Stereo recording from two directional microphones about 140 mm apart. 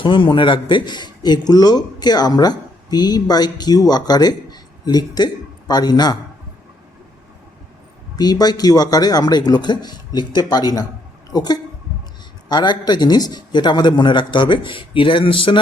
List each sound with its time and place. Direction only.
0.0 s a man's voice: 35° left (ahead or behind)
8.1 s a man's voice: 30° left (ahead or behind)